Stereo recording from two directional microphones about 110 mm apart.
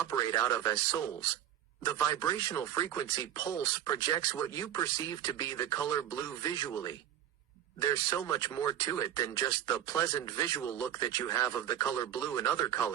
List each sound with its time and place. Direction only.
0.1 s speech: 30° left (ahead or behind)
1.8 s speech: 30° left (ahead or behind)